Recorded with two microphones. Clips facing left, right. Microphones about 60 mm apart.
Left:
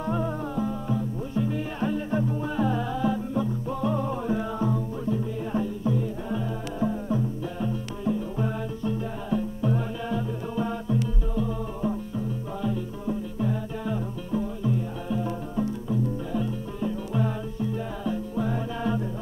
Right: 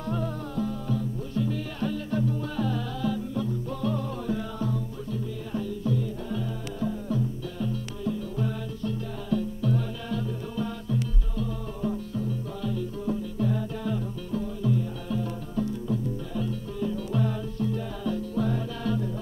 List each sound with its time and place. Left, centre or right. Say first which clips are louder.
0.0 s music: left 3 dB; left